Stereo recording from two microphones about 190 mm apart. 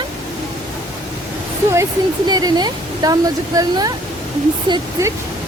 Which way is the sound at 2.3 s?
20° right (ahead or behind).